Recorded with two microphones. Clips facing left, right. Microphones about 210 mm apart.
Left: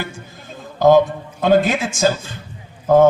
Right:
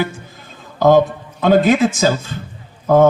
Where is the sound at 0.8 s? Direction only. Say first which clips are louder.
Even; 50° right (ahead or behind).